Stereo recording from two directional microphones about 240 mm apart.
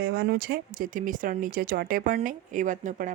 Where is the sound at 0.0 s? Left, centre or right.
Right.